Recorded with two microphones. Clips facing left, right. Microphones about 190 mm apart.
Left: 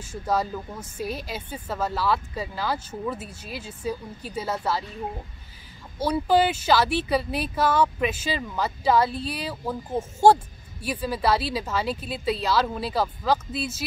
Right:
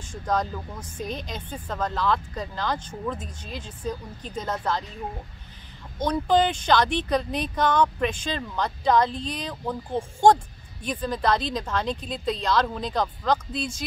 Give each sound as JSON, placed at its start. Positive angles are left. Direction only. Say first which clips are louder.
{"t": 0.0, "sound": "a woman's voice", "louder": "left 1 dB", "side_deg": 5}
{"t": 5.9, "sound": "a woman's voice", "louder": "left 1 dB", "side_deg": 5}